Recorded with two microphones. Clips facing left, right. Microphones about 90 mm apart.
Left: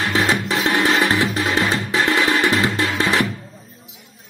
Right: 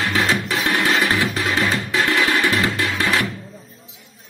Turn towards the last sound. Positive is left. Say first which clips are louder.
# left 2 dB
turn(degrees=25)  # may be behind; listen again after turning